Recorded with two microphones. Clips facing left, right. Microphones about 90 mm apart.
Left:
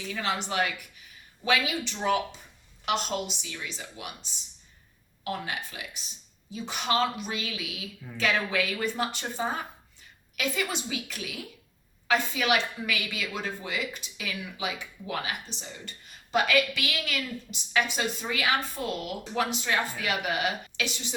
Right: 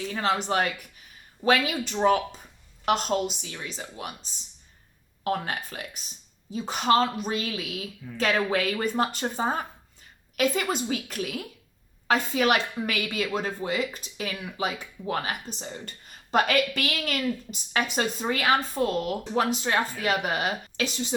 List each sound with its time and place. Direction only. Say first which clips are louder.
0.1 s a woman's voice: right 4 dB; 40° right (ahead or behind)